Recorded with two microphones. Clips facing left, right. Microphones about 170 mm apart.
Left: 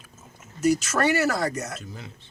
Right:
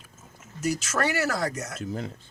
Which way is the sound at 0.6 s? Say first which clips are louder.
Left 7 dB; 65° left (ahead or behind).